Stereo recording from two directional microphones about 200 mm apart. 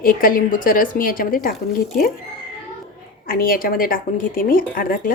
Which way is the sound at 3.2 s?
45° left (ahead or behind).